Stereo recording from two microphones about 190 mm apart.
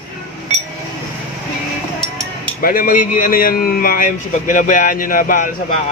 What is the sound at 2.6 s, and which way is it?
Speech, 50° left (ahead or behind).